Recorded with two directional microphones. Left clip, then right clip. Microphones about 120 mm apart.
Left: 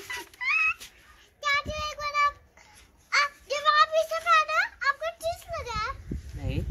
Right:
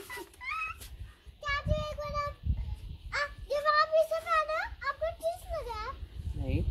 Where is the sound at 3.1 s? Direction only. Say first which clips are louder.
Left 7 dB; 35° right (ahead or behind).